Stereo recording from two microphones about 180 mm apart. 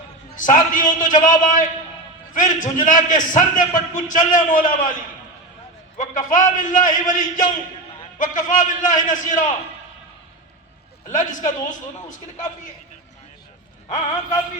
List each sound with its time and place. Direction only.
0.3 s a man's voice: 45° left (ahead or behind)
6.0 s a man's voice: 45° left (ahead or behind)
11.1 s a man's voice: 45° left (ahead or behind)